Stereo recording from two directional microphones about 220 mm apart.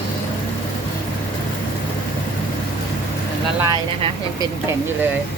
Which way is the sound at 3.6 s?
20° right (ahead or behind).